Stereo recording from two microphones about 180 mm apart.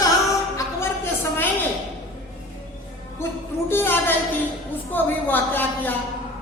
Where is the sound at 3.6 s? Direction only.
10° left (ahead or behind).